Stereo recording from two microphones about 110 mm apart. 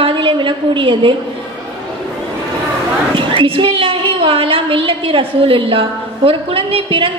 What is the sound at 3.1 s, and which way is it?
A woman's voice, 50° right (ahead or behind).